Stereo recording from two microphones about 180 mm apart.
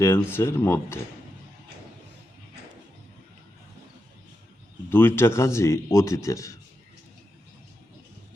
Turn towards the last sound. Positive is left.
turn(degrees=15)  # may be behind; listen again after turning